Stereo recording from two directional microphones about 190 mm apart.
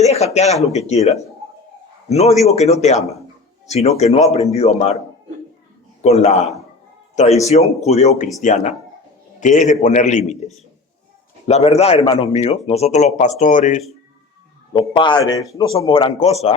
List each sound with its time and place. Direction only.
0.0 s speech: 35° left (ahead or behind)
6.0 s speech: 35° left (ahead or behind)
14.7 s speech: 25° left (ahead or behind)